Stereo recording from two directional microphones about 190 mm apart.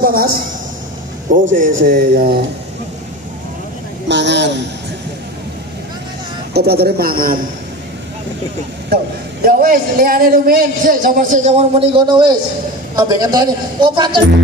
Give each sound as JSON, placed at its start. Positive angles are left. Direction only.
{"t": 0.0, "sound": "a woman's voice", "side_deg": -50}
{"t": 1.6, "sound": "a man's voice", "side_deg": -45}
{"t": 4.1, "sound": "a man's voice", "side_deg": -65}
{"t": 6.5, "sound": "a man's voice", "side_deg": -55}
{"t": 8.9, "sound": "a man's voice", "side_deg": -50}
{"t": 11.9, "sound": "speech", "side_deg": -25}